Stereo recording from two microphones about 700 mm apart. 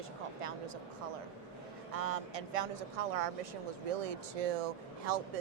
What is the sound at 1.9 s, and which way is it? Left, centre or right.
Speech, right.